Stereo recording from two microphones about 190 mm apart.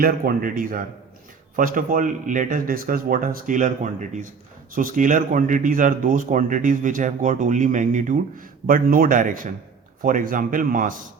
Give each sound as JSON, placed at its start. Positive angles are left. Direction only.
{"t": 0.0, "sound": "speech", "side_deg": -50}
{"t": 4.7, "sound": "speech", "side_deg": -45}